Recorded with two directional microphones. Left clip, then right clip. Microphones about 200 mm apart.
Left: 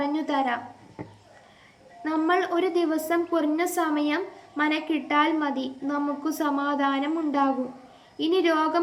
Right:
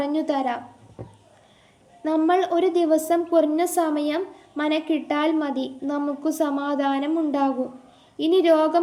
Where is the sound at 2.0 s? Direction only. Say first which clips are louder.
Right 4 dB; 50° right (ahead or behind).